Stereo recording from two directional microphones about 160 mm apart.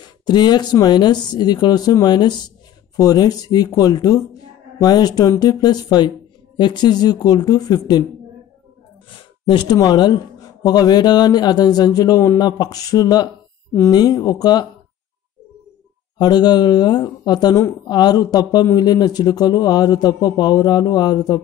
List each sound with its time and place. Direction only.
0.3 s speech: 25° left (ahead or behind)
9.5 s speech: 25° left (ahead or behind)
16.2 s speech: 25° left (ahead or behind)